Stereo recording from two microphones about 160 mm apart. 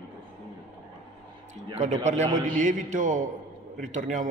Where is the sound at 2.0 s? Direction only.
50° right (ahead or behind).